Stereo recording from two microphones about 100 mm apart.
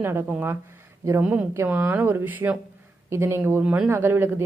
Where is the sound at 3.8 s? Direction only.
25° right (ahead or behind).